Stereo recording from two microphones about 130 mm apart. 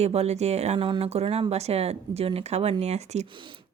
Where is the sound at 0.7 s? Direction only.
40° right (ahead or behind); by 3.3 s 60° right (ahead or behind).